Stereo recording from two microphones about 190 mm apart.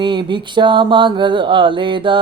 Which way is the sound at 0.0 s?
25° right (ahead or behind).